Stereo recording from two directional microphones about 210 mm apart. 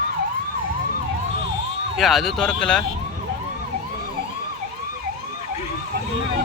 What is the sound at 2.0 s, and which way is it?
Speech, centre (ahead or behind).